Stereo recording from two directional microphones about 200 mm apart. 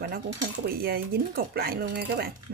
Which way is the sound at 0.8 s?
50° right (ahead or behind).